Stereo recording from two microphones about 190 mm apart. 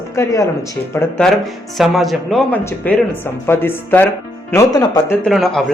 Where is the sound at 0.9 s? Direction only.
5° left (ahead or behind).